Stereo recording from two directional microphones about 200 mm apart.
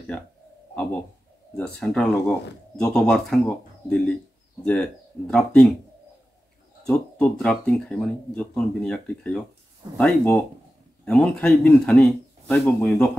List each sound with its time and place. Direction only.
1.6 s speech: 5° left (ahead or behind)
6.8 s speech: centre (ahead or behind)